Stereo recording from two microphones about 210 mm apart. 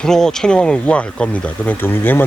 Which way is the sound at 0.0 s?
5° left (ahead or behind).